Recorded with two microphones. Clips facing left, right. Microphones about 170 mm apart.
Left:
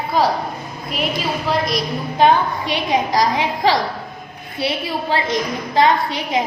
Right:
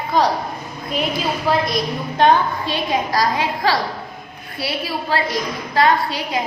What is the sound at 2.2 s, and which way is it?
A woman's voice, 15° left (ahead or behind).